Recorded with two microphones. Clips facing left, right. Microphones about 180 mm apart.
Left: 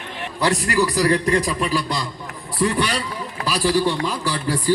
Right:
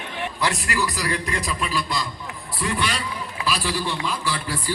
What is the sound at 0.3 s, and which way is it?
A man's voice, 35° left (ahead or behind).